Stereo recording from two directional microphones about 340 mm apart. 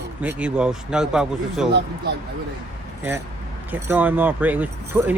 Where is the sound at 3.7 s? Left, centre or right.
Centre.